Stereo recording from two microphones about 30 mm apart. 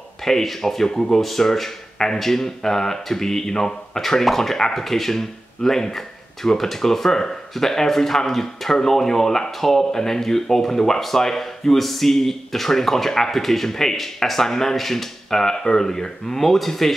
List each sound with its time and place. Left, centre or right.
0.2 s speech: centre